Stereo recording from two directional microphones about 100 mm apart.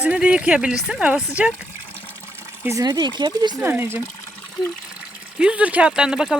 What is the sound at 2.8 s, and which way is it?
Speech, 40° right (ahead or behind).